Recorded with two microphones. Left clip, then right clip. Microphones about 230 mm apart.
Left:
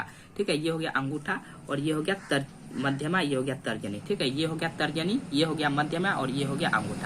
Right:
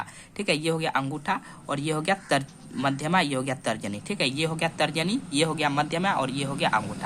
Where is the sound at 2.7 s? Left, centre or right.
Right.